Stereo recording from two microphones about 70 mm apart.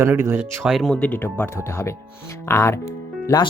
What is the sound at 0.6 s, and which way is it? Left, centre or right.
Speech, centre.